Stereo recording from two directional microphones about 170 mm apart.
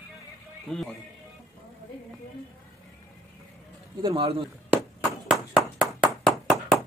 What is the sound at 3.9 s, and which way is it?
Speech, 30° right (ahead or behind).